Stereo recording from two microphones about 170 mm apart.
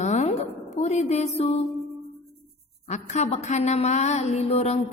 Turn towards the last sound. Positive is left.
turn(degrees=40)  # may be behind; listen again after turning